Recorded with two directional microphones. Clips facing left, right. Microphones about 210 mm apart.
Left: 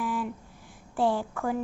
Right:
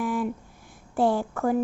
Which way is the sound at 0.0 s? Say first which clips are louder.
Right 4 dB; 55° right (ahead or behind).